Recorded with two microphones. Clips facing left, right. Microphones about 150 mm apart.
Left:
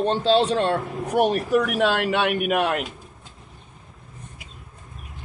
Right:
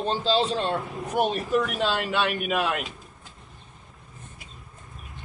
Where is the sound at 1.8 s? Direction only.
65° left (ahead or behind).